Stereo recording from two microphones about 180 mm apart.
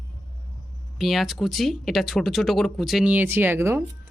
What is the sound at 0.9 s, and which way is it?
Speech, centre (ahead or behind).